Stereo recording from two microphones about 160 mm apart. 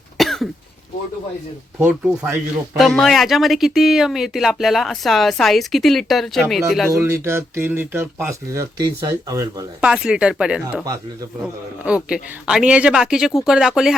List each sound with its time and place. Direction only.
0.2 s cough: centre (ahead or behind)
1.8 s speech: 10° right (ahead or behind)
7.0 s speech: 15° right (ahead or behind)
9.8 s speech: 5° right (ahead or behind)
10.8 s speech: 20° right (ahead or behind)
11.9 s speech: 5° right (ahead or behind)